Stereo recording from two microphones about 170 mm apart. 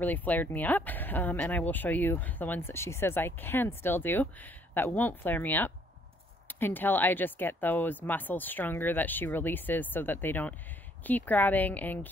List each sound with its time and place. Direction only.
0.0 s speech: 10° left (ahead or behind)